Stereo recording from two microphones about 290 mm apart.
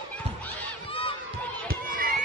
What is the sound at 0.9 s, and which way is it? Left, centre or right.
Crowd, centre.